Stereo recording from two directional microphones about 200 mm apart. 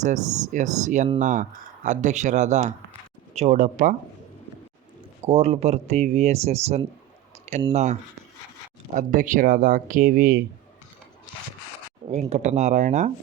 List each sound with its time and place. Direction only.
0.0 s speech: 40° right (ahead or behind)
5.2 s speech: 30° right (ahead or behind)
9.0 s speech: 40° right (ahead or behind)
12.1 s speech: 35° right (ahead or behind)